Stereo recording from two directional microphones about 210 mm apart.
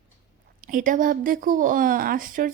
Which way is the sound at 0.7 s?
40° right (ahead or behind).